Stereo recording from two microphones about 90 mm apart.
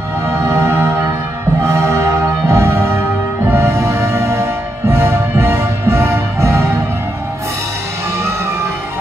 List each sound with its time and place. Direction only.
0.3 s music: 30° right (ahead or behind)